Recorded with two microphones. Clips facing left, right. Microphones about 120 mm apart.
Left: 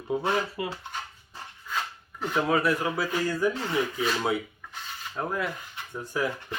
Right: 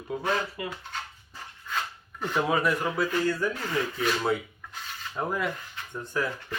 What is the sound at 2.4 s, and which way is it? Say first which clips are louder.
Speech: left 1 dB; centre (ahead or behind).